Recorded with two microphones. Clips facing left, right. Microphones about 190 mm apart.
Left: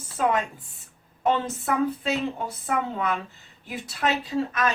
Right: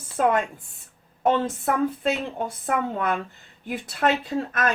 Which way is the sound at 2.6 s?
50° right (ahead or behind).